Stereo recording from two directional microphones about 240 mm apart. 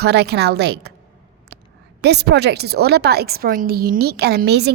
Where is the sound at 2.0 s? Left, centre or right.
Right.